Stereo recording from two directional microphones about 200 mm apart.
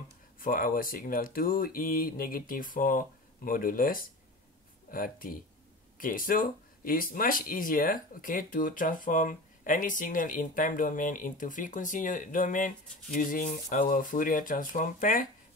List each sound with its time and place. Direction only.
0.4 s speech: 45° left (ahead or behind)